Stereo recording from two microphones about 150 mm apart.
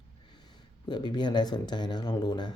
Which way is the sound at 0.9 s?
30° left (ahead or behind).